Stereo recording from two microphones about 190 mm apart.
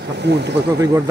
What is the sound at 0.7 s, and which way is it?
Speech, 20° right (ahead or behind).